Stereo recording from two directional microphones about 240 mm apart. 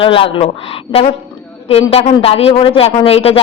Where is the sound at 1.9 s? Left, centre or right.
Left.